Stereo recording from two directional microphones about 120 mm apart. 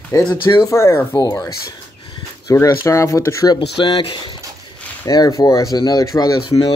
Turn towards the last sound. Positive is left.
turn(degrees=25)  # may be behind; listen again after turning